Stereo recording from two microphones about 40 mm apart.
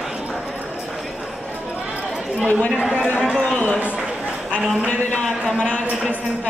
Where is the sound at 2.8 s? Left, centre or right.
Right.